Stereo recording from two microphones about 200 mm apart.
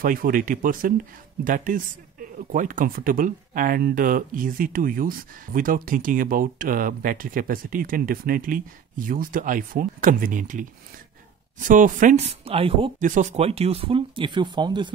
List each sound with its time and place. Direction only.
0.0 s speech: 45° right (ahead or behind); by 12.9 s 30° right (ahead or behind)
13.0 s speech: 40° right (ahead or behind); by 14.9 s 20° right (ahead or behind)